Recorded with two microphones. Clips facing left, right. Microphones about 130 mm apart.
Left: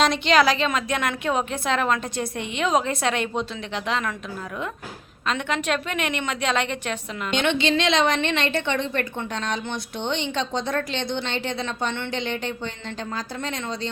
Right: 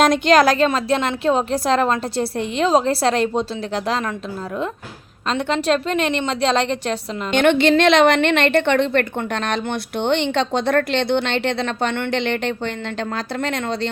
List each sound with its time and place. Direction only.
0.0 s speech: 45° right (ahead or behind)
0.7 s a woman's voice: 30° right (ahead or behind)
5.3 s a woman's voice: 35° right (ahead or behind)
7.3 s a woman's voice: 55° right (ahead or behind)